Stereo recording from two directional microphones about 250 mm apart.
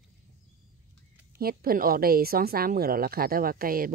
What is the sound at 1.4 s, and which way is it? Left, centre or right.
A woman's voice, right.